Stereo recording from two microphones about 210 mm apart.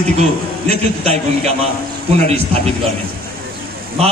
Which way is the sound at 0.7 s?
30° right (ahead or behind).